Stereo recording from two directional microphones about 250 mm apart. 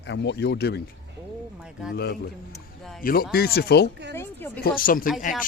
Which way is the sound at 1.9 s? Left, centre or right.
Left.